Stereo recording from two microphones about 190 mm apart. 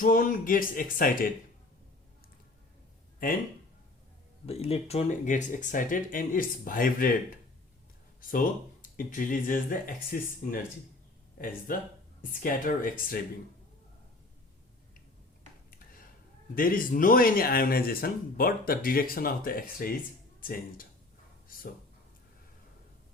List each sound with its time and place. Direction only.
0.0 s speech: 45° left (ahead or behind)
4.4 s speech: 30° left (ahead or behind); by 10.6 s 50° left (ahead or behind)
11.7 s speech: 50° left (ahead or behind)
16.6 s speech: 50° left (ahead or behind)
21.4 s a sound: 50° left (ahead or behind)